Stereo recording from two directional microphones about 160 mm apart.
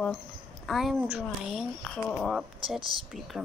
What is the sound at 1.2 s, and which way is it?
Speech, 5° left (ahead or behind).